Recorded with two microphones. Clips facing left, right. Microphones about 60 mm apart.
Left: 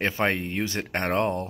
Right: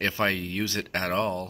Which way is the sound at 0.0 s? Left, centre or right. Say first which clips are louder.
Left 1 dB; left.